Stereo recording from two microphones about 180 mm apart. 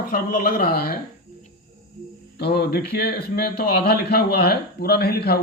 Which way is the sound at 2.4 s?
65° left (ahead or behind).